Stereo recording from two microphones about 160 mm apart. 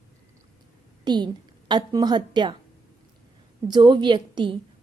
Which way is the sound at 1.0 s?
30° right (ahead or behind).